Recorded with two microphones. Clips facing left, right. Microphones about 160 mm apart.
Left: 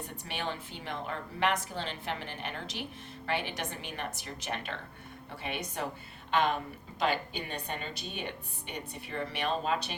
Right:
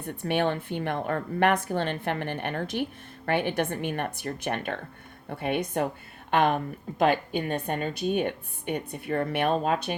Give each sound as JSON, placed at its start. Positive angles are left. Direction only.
{"t": 0.0, "sound": "a woman's voice", "side_deg": -55}